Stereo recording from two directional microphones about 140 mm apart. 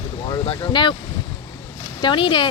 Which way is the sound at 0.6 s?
35° left (ahead or behind).